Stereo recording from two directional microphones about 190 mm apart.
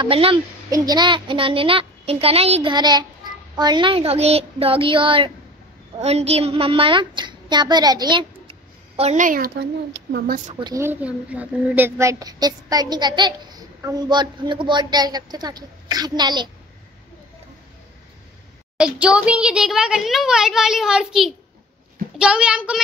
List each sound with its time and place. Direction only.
0.0 s a child's voice: 30° right (ahead or behind); by 10.5 s 50° right (ahead or behind)
10.6 s a child's voice: 15° right (ahead or behind)
18.8 s a child's voice: 5° right (ahead or behind)